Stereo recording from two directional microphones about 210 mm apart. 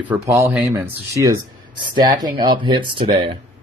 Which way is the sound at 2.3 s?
20° right (ahead or behind).